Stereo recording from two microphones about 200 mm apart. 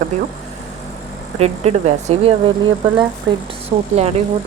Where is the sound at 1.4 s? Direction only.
30° right (ahead or behind).